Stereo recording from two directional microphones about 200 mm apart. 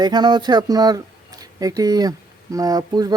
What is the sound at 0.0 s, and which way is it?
Speech, 20° right (ahead or behind).